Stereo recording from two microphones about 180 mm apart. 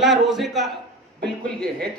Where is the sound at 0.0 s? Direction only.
Centre (ahead or behind).